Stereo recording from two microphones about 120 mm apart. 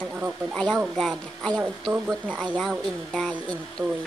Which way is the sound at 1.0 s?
Centre (ahead or behind).